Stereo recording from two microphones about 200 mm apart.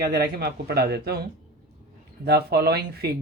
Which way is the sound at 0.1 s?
55° right (ahead or behind).